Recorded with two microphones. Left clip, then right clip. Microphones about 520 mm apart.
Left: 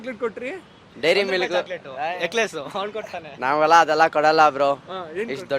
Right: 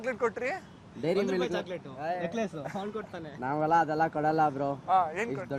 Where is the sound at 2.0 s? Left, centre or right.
Left.